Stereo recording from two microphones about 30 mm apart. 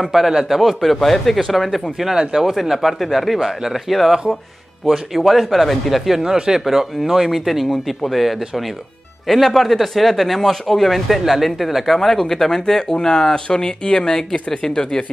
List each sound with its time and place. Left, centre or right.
0.0 s speech: centre
2.1 s speech: centre
2.5 s speech: centre
5.1 s speech: centre
6.1 s speech: right
6.6 s speech: centre